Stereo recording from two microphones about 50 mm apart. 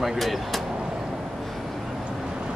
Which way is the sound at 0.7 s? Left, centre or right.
Centre.